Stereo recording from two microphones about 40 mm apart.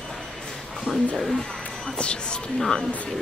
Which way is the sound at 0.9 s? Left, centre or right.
Centre.